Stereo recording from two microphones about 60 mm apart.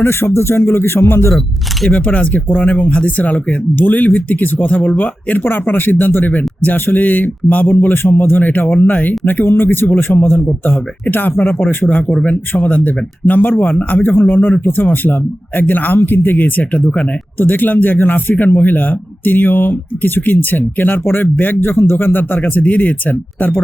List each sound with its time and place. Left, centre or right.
0.0 s speech: left
1.9 s speech: left